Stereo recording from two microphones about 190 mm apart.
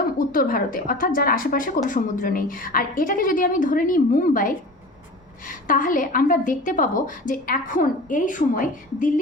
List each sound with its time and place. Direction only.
0.2 s a woman's voice: 50° left (ahead or behind)